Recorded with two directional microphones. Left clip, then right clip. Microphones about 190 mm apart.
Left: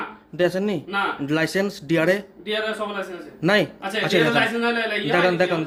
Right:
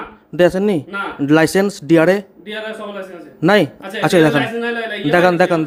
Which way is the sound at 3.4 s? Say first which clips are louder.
Right 6 dB; 35° right (ahead or behind).